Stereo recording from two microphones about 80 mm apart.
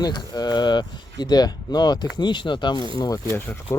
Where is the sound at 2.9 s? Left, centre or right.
Left.